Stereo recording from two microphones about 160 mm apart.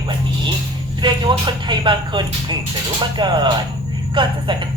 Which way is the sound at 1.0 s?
30° right (ahead or behind).